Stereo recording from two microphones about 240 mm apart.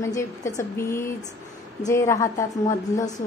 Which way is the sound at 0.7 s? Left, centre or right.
Centre.